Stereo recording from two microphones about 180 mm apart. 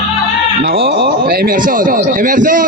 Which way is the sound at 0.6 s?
65° right (ahead or behind).